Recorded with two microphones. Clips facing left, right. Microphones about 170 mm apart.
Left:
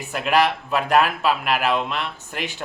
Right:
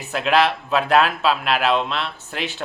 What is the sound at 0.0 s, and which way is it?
Speech, 10° left (ahead or behind).